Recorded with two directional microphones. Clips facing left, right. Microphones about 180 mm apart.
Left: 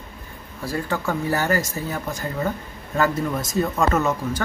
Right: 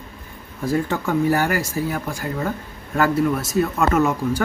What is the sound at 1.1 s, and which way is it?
Speech, 10° right (ahead or behind).